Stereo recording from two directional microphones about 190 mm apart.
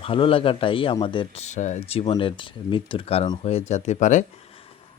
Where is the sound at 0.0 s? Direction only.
30° left (ahead or behind).